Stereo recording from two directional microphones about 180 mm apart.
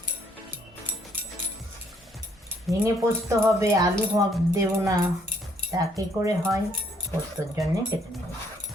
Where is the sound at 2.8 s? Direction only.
15° right (ahead or behind).